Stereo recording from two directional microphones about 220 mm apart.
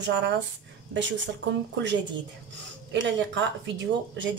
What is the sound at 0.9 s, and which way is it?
Speech, 55° right (ahead or behind).